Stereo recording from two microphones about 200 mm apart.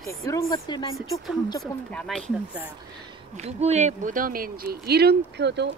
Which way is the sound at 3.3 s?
35° right (ahead or behind).